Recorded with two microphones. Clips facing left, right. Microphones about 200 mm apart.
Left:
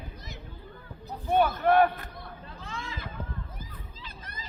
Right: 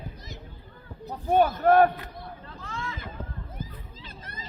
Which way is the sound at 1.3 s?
40° right (ahead or behind).